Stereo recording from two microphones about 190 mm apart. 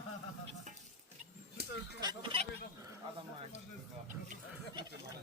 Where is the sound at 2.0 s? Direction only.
25° right (ahead or behind).